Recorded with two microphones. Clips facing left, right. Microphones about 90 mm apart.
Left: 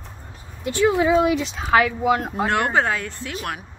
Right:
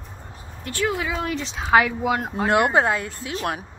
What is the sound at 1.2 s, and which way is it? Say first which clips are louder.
Speech: left 3 dB; 5° left (ahead or behind).